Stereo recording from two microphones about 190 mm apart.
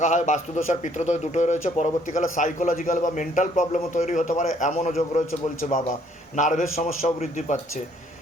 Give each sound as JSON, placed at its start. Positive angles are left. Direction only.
{"t": 0.0, "sound": "a man's voice", "side_deg": 40}
{"t": 6.3, "sound": "a man's voice", "side_deg": 40}